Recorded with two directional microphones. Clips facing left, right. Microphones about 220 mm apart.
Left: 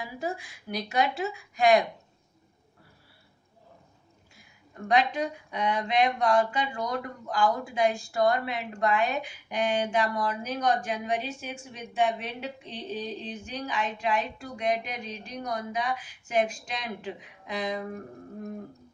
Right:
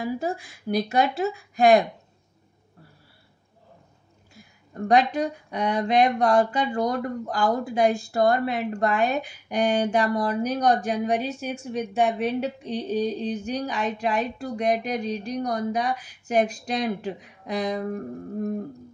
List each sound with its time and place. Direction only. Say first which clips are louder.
0.0 s speech: right 6 dB; 40° right (ahead or behind)
4.7 s speech: right 5 dB; 40° right (ahead or behind)